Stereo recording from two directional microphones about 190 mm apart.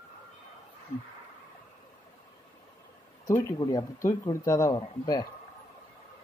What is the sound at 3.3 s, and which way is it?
Speech, 15° left (ahead or behind).